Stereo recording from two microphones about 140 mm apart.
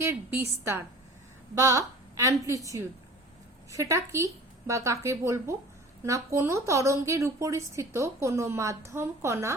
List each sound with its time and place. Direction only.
0.0 s a woman's voice: 20° right (ahead or behind)